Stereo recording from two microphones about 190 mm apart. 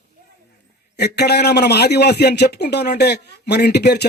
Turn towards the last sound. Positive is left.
turn(degrees=60)  # may be behind; listen again after turning